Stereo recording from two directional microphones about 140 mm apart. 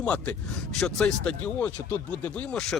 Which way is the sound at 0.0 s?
10° left (ahead or behind).